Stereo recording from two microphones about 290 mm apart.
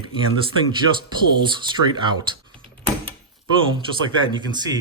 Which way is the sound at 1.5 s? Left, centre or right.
Centre.